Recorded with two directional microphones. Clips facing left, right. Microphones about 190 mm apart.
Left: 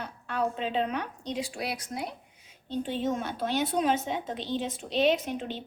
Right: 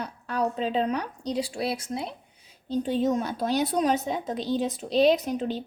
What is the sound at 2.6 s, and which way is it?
A woman's voice, 40° right (ahead or behind).